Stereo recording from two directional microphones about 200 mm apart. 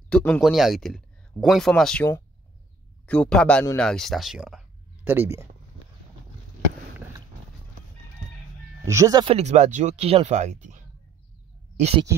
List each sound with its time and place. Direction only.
0.1 s speech: 5° left (ahead or behind)
3.1 s speech: 5° left (ahead or behind); by 5.5 s 10° right (ahead or behind)
8.8 s speech: 15° right (ahead or behind); by 10.8 s 35° right (ahead or behind)
11.7 s a sound: 35° right (ahead or behind)